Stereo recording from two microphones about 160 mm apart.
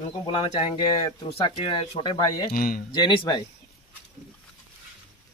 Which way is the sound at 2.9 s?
30° left (ahead or behind).